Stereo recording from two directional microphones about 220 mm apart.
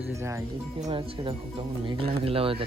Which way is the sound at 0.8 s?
25° right (ahead or behind).